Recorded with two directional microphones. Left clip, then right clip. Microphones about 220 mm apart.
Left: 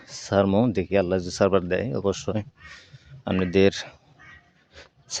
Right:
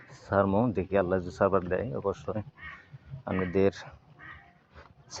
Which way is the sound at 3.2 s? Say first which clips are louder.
Left 6 dB; 60° left (ahead or behind).